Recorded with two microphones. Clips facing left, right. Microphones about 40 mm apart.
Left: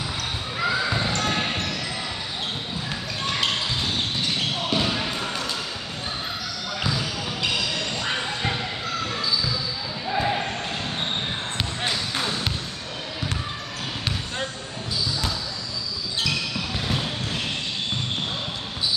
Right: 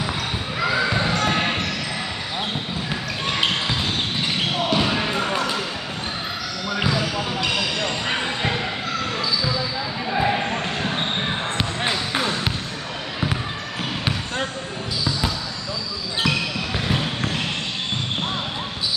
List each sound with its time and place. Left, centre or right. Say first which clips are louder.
0.7 s basketball bounce: right 4 dB; right
3.3 s basketball bounce: right 3 dB; right
6.8 s basketball bounce: right 5 dB; right
10.0 s basketball bounce: right 2 dB; right
14.0 s basketball bounce: right 3 dB; centre
16.2 s basketball bounce: right 4 dB; right